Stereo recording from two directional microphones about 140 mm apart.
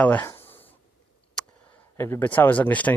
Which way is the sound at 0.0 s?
10° left (ahead or behind).